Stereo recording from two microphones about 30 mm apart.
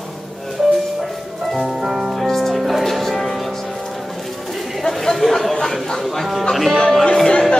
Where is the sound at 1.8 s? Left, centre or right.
Centre.